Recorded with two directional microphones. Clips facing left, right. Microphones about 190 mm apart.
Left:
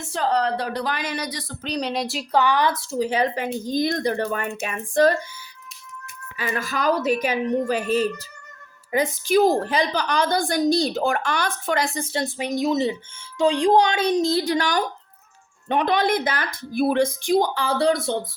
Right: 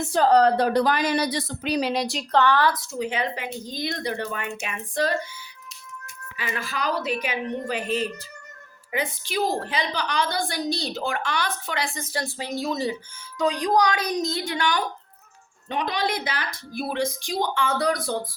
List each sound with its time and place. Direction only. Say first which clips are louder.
0.1 s a woman's voice: right 4 dB; 40° right (ahead or behind)
1.6 s a woman's voice: right 1 dB; 5° right (ahead or behind); by 5.1 s 45° left (ahead or behind)
6.3 s a woman's voice: left 4 dB; 45° left (ahead or behind)
11.9 s speech: left 4 dB; 25° left (ahead or behind)
15.7 s a woman's voice: left 6 dB; 55° left (ahead or behind)
17.5 s speech: left 3 dB; 35° left (ahead or behind)